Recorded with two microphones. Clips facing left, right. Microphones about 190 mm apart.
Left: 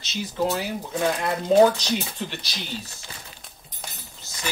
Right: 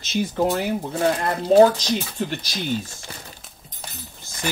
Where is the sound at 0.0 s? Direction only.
50° right (ahead or behind).